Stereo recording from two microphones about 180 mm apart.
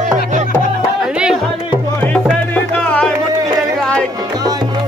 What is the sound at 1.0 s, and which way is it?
Music, 5° right (ahead or behind).